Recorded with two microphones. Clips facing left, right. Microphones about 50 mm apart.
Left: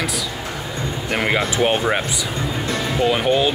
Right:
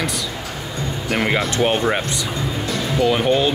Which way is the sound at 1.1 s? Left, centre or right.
Centre.